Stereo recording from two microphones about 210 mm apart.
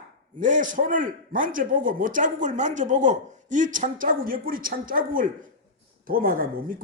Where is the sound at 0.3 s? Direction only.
35° right (ahead or behind).